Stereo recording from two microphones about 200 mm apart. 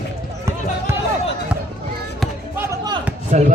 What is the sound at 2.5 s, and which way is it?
Music, 15° right (ahead or behind).